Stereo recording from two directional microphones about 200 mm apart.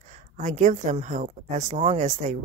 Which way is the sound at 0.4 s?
40° right (ahead or behind).